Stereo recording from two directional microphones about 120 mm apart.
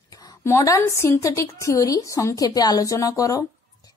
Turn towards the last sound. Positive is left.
turn(degrees=30)  # may be behind; listen again after turning